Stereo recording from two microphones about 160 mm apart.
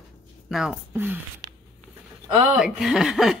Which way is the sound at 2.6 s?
5° right (ahead or behind).